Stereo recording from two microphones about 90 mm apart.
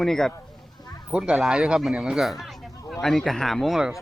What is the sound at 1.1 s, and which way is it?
Speech, 10° right (ahead or behind).